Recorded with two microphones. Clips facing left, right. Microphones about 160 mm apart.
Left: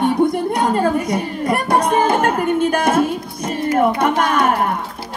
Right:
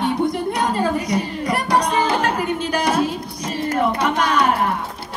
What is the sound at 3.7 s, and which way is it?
Speech, 50° left (ahead or behind).